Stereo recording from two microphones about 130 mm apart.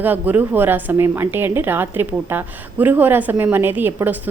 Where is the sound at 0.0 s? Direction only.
15° right (ahead or behind).